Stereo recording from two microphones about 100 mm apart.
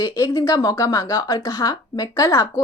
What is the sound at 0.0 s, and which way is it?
A woman's voice, 35° left (ahead or behind).